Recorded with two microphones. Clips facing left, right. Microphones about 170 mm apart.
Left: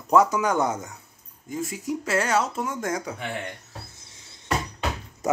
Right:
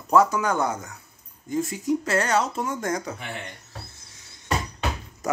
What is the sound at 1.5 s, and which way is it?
Speech, 5° left (ahead or behind).